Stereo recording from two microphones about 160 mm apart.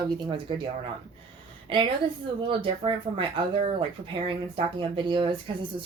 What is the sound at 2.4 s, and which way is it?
Speech, 35° right (ahead or behind).